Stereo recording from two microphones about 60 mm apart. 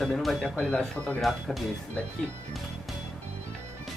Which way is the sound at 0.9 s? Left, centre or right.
Left.